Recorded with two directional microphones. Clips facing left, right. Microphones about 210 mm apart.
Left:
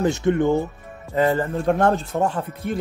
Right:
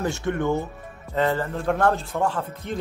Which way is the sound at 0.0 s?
20° left (ahead or behind).